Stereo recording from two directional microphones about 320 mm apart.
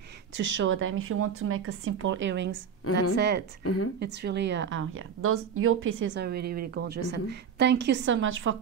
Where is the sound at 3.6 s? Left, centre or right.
Left.